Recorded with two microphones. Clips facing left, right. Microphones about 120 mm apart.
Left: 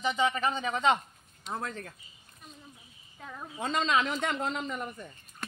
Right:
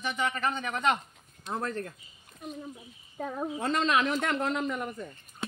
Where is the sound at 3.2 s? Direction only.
35° right (ahead or behind).